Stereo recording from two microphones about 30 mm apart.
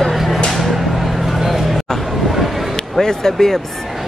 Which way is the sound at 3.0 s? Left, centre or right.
Centre.